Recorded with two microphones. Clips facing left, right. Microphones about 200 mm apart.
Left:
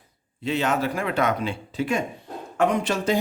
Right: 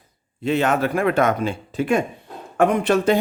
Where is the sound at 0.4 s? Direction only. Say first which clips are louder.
Right 4 dB; 55° right (ahead or behind).